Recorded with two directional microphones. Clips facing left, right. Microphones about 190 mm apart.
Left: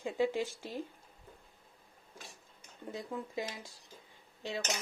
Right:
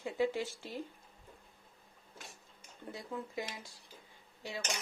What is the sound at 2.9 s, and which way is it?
Speech, 20° left (ahead or behind).